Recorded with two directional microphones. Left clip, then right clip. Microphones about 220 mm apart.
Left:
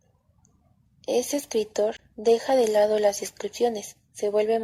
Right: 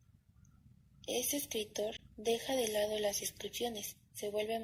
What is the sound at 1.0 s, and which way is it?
A woman's voice, 35° left (ahead or behind).